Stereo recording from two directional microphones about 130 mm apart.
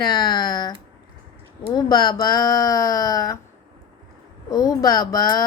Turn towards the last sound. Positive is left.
turn(degrees=30)  # may be behind; listen again after turning